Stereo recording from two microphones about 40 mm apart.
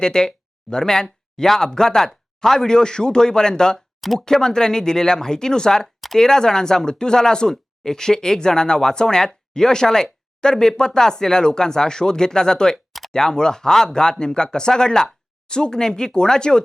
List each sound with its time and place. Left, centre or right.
0.0 s speech: centre